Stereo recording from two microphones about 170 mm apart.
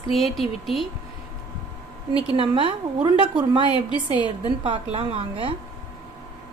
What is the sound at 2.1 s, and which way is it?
A woman's voice, 30° right (ahead or behind).